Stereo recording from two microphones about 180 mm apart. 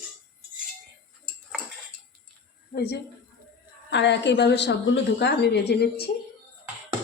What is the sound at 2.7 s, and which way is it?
Speech, 65° left (ahead or behind).